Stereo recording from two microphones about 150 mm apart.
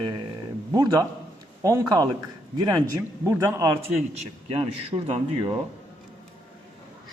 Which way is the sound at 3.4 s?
20° right (ahead or behind).